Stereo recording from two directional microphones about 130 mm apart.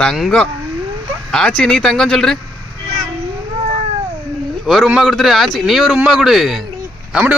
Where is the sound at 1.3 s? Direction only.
5° left (ahead or behind).